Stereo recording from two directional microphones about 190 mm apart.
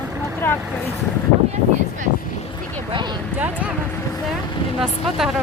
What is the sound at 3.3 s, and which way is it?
Speech, 10° right (ahead or behind).